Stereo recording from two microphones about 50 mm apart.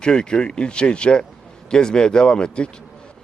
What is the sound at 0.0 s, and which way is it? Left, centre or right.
A man's voice, centre.